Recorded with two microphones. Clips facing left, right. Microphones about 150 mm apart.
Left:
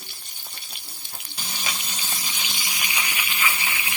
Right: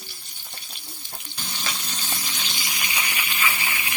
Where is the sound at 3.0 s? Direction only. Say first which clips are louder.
Even; 15° left (ahead or behind).